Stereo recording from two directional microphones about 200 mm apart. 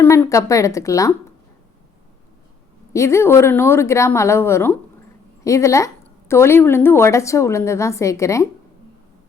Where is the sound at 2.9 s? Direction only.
15° left (ahead or behind).